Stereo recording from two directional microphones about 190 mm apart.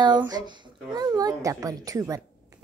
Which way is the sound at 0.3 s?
20° right (ahead or behind).